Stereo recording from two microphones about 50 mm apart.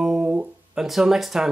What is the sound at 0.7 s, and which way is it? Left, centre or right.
Speech, centre.